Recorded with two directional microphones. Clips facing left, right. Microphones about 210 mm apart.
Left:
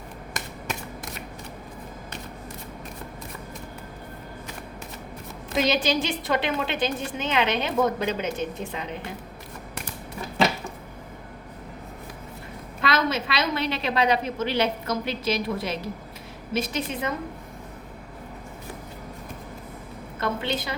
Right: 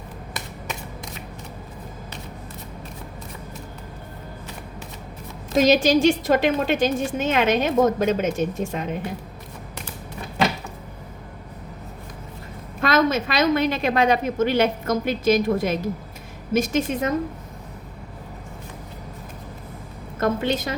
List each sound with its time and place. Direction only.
5.5 s a woman's voice: 45° right (ahead or behind)
12.8 s a woman's voice: 50° right (ahead or behind)
20.1 s a woman's voice: 45° right (ahead or behind)